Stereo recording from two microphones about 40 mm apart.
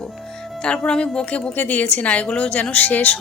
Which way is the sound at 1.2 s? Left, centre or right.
Left.